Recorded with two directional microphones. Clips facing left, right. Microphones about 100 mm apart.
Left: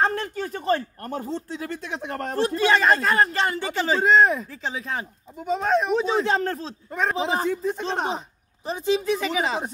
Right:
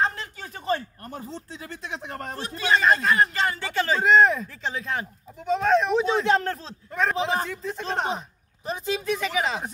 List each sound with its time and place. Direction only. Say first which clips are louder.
0.0 s speech: left 3 dB; 50° left (ahead or behind)
3.5 s speech: left 1 dB; 20° left (ahead or behind); by 9.6 s centre (ahead or behind)